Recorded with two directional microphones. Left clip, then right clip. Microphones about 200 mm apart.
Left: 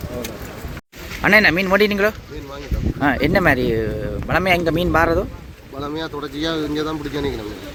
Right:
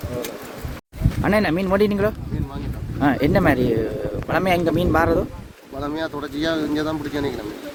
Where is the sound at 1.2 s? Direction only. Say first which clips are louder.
Left 6 dB; 10° right (ahead or behind).